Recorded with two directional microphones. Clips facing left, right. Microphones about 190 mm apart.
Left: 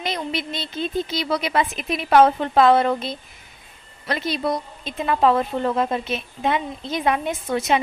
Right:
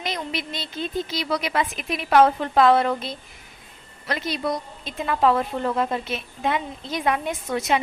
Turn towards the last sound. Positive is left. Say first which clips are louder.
# left 2 dB
turn(degrees=25)  # may be behind; listen again after turning